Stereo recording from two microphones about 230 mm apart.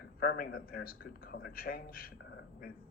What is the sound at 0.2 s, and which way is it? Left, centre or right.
A man's voice, left.